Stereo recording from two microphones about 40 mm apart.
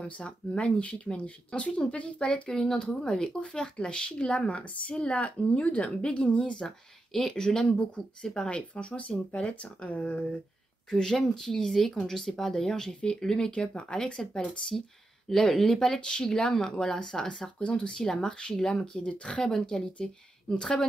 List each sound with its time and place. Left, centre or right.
0.0 s speech: left
2.5 s speech: centre
7.1 s speech: centre
8.7 s speech: left
10.9 s speech: centre
17.6 s speech: left
17.9 s speech: centre